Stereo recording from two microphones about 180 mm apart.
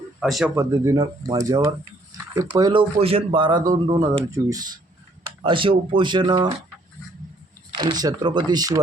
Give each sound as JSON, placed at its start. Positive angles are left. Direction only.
{"t": 0.2, "sound": "speech", "side_deg": 0}
{"t": 0.5, "sound": "speech", "side_deg": -15}
{"t": 7.7, "sound": "speech", "side_deg": -25}